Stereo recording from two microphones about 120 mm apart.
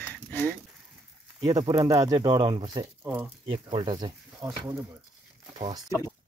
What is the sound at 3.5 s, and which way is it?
Speech, 45° right (ahead or behind).